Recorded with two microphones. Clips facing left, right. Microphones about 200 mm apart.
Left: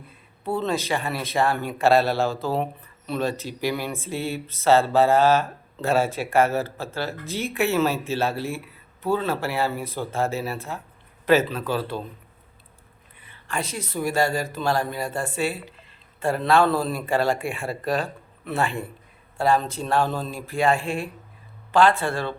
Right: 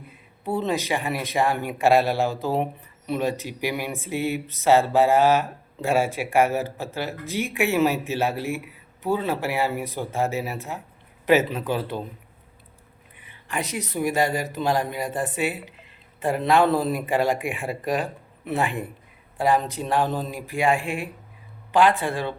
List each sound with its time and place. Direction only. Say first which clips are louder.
0.4 s speech: even; 15° right (ahead or behind)
13.1 s speech: even; 15° right (ahead or behind)